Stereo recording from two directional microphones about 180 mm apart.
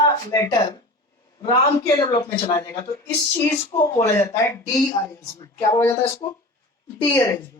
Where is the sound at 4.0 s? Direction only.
15° left (ahead or behind).